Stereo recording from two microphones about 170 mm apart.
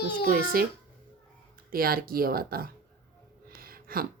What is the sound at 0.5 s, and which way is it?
Speech, 60° right (ahead or behind).